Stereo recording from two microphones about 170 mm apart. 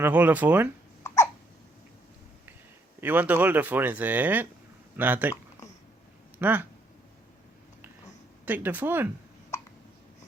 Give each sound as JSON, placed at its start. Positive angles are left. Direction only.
{"t": 0.0, "sound": "speech", "side_deg": -10}
{"t": 1.0, "sound": "hiccup", "side_deg": 15}
{"t": 3.0, "sound": "speech", "side_deg": -10}
{"t": 6.4, "sound": "speech", "side_deg": -10}
{"t": 8.4, "sound": "speech", "side_deg": -10}